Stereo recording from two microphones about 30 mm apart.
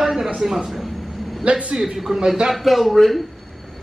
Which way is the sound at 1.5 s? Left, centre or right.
Right.